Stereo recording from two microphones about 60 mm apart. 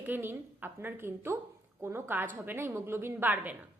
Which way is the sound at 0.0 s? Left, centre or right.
Right.